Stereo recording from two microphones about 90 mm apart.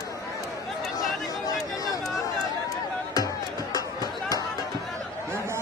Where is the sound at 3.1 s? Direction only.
45° left (ahead or behind).